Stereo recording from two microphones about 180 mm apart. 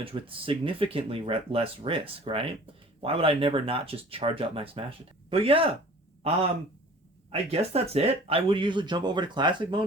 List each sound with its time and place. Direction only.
0.0 s speech: 30° right (ahead or behind)
7.3 s speech: 35° right (ahead or behind)